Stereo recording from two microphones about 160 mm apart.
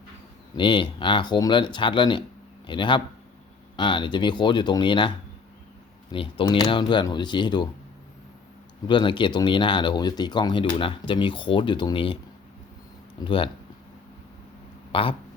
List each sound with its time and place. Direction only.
0.5 s speech: 30° left (ahead or behind)
8.9 s speech: 30° left (ahead or behind)
13.1 s speech: 35° left (ahead or behind)
14.9 s speech: 35° left (ahead or behind)